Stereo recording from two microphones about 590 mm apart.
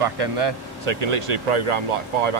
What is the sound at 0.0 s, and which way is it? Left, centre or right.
Speech, right.